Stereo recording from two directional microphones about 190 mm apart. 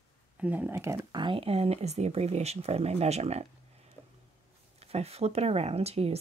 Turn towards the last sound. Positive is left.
turn(degrees=-30)  # may be behind; listen again after turning